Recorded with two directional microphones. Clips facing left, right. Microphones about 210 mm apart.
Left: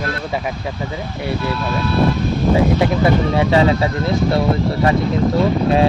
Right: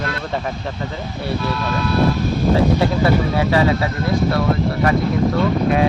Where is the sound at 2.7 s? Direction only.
20° left (ahead or behind).